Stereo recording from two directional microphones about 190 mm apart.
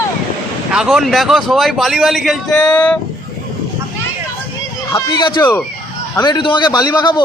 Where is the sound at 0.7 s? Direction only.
5° right (ahead or behind).